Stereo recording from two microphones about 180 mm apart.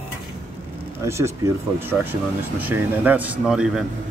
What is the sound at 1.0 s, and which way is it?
Speech, 15° right (ahead or behind).